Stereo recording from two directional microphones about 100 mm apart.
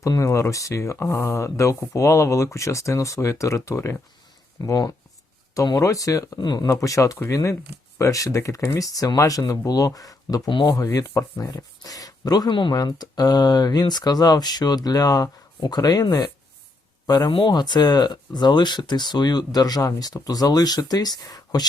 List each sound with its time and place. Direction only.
0.0 s speech: 30° left (ahead or behind)
6.4 s speech: 45° left (ahead or behind)
6.7 s speech: 35° left (ahead or behind); by 12.7 s 55° left (ahead or behind)
12.7 s speech: 40° left (ahead or behind)